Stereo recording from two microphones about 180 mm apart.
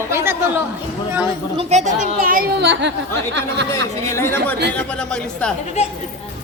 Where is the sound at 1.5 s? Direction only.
40° right (ahead or behind); by 2.9 s 70° right (ahead or behind).